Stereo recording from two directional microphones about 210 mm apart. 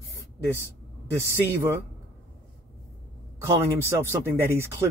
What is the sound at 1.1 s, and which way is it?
Speech, 15° right (ahead or behind).